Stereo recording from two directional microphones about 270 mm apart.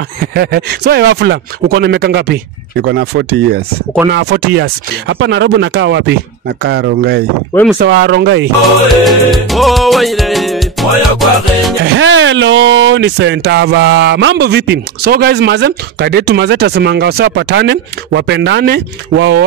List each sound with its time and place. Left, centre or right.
0.2 s speech: right
9.0 s music: centre
11.8 s speech: right